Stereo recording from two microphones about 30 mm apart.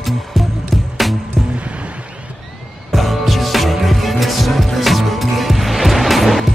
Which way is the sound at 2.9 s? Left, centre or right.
Centre.